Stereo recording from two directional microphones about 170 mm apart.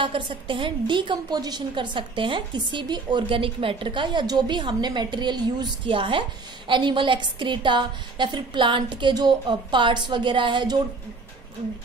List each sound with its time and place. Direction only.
0.0 s a woman's voice: 30° right (ahead or behind)